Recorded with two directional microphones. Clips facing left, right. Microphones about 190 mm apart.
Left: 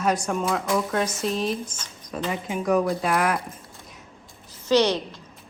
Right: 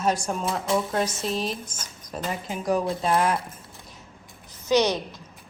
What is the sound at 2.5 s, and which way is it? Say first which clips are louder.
Speech: left 3 dB; 35° right (ahead or behind).